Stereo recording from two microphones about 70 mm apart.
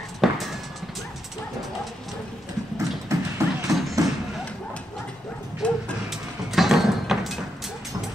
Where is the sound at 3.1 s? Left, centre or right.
Right.